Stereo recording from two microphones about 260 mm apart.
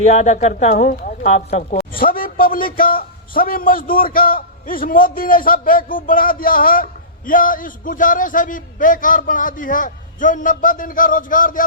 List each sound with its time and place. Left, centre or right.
0.1 s speech: left